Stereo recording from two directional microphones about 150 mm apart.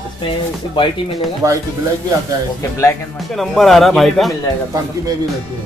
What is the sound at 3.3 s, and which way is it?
Speech, centre (ahead or behind).